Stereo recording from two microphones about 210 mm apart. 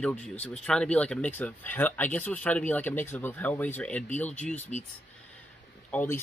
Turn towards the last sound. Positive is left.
turn(degrees=10)  # may be behind; listen again after turning